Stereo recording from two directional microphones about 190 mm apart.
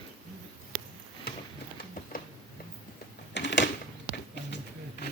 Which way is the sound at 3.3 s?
70° left (ahead or behind).